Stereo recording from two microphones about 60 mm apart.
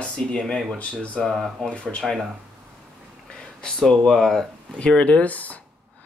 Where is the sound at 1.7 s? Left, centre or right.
Centre.